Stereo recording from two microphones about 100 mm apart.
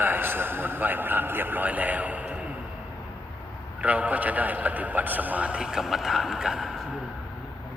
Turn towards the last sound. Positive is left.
turn(degrees=-5)  # may be behind; listen again after turning